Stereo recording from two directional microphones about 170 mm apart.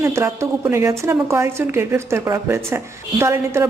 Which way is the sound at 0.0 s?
15° right (ahead or behind).